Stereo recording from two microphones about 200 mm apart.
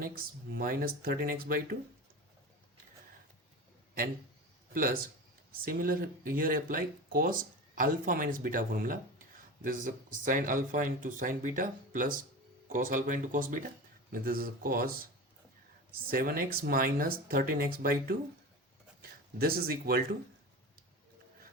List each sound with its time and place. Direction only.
0.5 s speech: 45° right (ahead or behind)
4.7 s speech: 45° right (ahead or behind)
19.4 s speech: 50° right (ahead or behind)